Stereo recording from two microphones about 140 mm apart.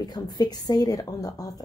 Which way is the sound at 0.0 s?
30° left (ahead or behind).